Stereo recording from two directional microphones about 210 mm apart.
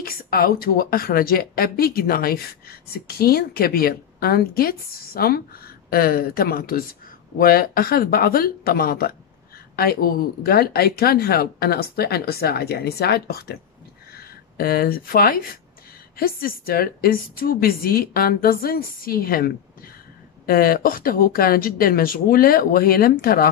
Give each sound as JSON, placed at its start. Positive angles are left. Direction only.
{"t": 0.0, "sound": "a woman's voice", "side_deg": 45}